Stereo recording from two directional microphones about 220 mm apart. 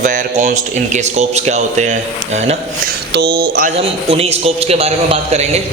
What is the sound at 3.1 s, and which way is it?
Speech, 45° right (ahead or behind).